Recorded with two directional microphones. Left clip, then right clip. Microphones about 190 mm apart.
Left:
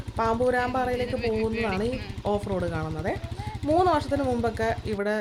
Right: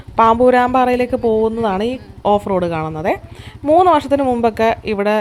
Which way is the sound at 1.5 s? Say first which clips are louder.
Right 10 dB; 15° right (ahead or behind).